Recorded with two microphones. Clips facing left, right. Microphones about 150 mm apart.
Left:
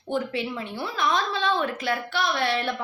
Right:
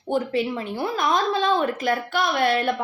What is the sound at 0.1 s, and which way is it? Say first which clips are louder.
A woman's voice: right 4 dB; 40° right (ahead or behind).